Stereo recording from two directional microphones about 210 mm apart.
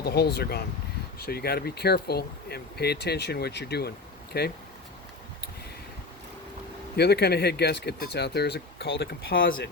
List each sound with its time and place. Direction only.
0.0 s speech: 50° left (ahead or behind)
6.9 s speech: 50° left (ahead or behind)